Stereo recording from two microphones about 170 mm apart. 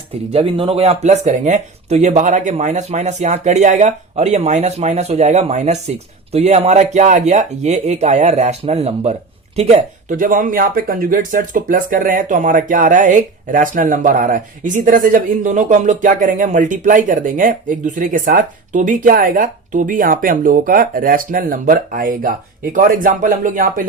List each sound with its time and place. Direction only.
0.3 s speech: 35° right (ahead or behind); by 23.8 s 55° right (ahead or behind)